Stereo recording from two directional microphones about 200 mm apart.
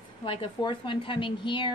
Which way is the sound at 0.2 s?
25° left (ahead or behind).